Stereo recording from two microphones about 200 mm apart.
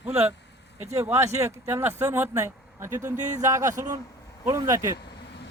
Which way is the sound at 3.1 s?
35° right (ahead or behind).